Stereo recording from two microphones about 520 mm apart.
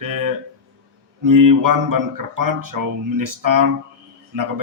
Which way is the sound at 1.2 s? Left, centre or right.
Right.